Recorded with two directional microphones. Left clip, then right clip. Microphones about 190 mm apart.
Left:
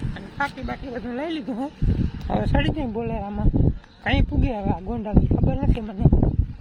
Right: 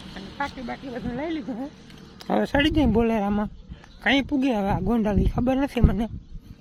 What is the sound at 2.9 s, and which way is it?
Speech, 40° right (ahead or behind).